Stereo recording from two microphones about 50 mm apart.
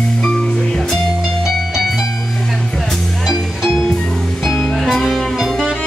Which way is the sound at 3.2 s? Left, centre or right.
Centre.